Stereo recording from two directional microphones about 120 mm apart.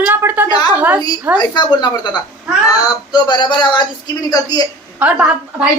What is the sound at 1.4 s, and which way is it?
Speech, 35° left (ahead or behind).